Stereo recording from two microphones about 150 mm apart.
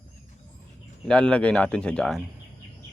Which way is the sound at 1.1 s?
5° left (ahead or behind).